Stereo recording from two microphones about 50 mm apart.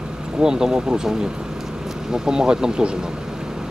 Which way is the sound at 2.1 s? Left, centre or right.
Centre.